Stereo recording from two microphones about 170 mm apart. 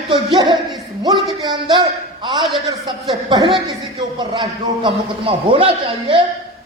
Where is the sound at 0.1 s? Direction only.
30° right (ahead or behind).